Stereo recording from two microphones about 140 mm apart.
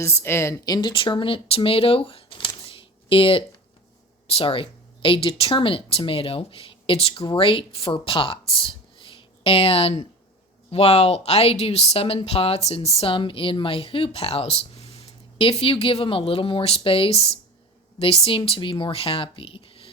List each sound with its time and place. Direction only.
0.0 s speech: 20° left (ahead or behind); by 19.9 s 40° left (ahead or behind)